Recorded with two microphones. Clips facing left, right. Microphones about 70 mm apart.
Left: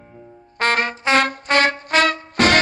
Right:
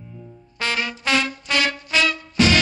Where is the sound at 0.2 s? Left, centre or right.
Left.